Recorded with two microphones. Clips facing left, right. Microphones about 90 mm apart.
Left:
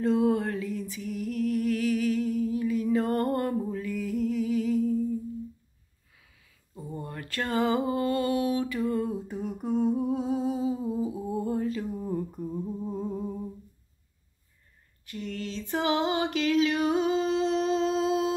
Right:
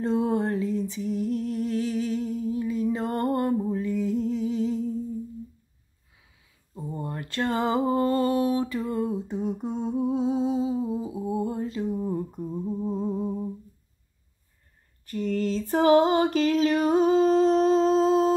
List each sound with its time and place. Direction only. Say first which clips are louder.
0.0 s music: even; 30° right (ahead or behind)
6.7 s a sound: right 4 dB; 25° right (ahead or behind)
15.0 s female singing: right 9 dB; 40° right (ahead or behind)